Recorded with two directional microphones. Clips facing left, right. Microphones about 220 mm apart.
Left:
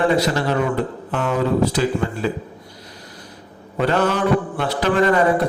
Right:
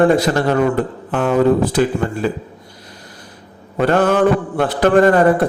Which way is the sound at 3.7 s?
50° right (ahead or behind).